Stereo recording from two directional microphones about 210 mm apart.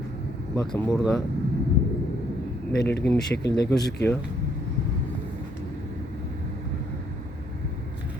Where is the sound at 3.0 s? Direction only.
5° left (ahead or behind).